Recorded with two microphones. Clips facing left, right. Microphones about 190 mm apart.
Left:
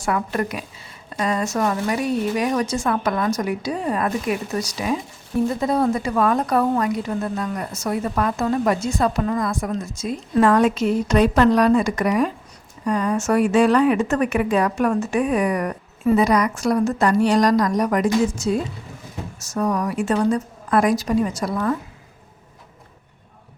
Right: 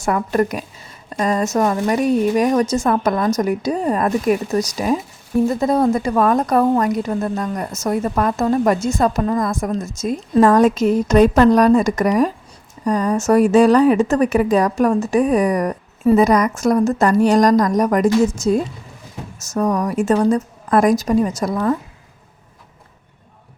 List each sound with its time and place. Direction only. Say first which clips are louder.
0.0 s a woman's voice: right 5 dB; 45° right (ahead or behind)